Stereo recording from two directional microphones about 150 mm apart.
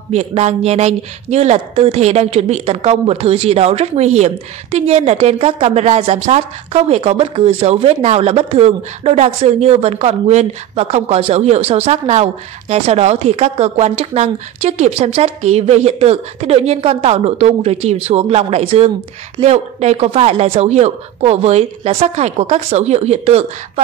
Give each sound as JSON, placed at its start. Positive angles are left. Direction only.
{"t": 0.1, "sound": "speech", "side_deg": -45}